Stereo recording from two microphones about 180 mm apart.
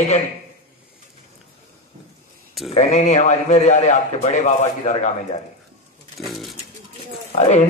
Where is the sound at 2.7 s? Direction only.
35° left (ahead or behind).